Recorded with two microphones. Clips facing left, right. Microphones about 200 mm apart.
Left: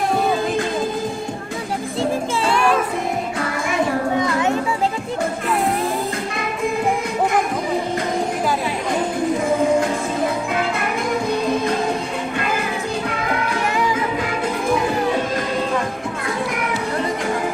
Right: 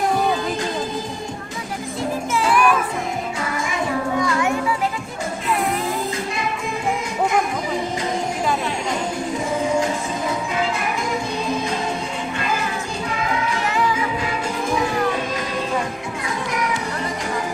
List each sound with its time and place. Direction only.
2.0 s music: 30° left (ahead or behind)
4.2 s children playing: 20° left (ahead or behind)